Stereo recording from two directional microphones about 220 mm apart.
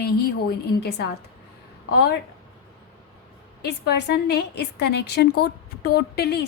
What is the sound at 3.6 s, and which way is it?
A woman's voice, 50° left (ahead or behind).